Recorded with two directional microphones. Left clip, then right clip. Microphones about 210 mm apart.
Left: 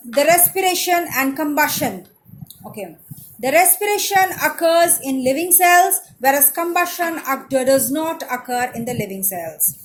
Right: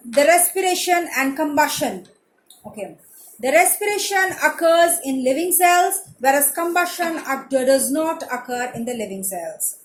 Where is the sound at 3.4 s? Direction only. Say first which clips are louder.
Left 1 dB; 35° left (ahead or behind).